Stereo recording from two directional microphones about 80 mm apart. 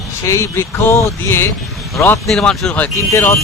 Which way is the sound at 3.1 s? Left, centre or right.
Left.